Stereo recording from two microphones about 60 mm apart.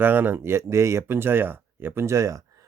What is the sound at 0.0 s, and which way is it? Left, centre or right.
Speech, right.